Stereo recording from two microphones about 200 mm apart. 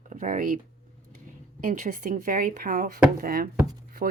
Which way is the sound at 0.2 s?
40° right (ahead or behind).